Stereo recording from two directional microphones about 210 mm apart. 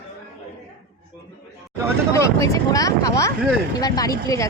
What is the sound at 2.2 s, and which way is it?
Speech, 15° left (ahead or behind).